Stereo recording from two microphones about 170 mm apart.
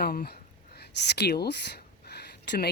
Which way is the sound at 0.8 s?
80° left.